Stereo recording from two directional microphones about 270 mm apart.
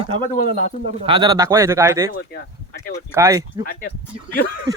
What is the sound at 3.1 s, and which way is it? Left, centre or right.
Speech, centre.